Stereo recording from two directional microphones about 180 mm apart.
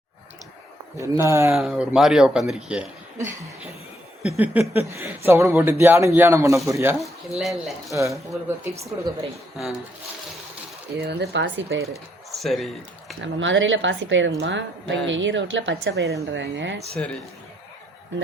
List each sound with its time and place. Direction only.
0.9 s speech: 15° right (ahead or behind)
1.5 s speech: centre (ahead or behind)
4.4 s speech: 10° right (ahead or behind)
7.0 s speech: centre (ahead or behind)
8.4 s speech: 15° right (ahead or behind)
9.6 s speech: centre (ahead or behind)
11.0 s speech: 60° right (ahead or behind); by 11.8 s 90° right
12.4 s speech: centre (ahead or behind)
13.2 s a woman's voice: 90° right; by 16.1 s 75° right (ahead or behind)
16.3 s a woman's voice: 90° right